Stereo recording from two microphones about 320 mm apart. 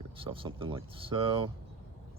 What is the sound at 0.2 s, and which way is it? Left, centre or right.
Speech, centre.